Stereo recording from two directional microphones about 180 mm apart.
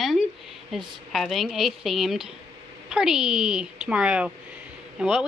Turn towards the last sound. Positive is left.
turn(degrees=-5)  # may be behind; listen again after turning